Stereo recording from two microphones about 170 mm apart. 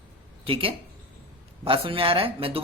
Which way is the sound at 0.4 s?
30° right (ahead or behind).